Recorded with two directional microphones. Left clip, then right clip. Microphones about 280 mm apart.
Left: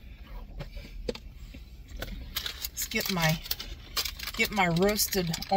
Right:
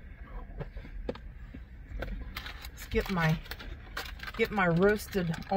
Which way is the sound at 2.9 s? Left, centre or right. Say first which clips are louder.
Left 2 dB; left.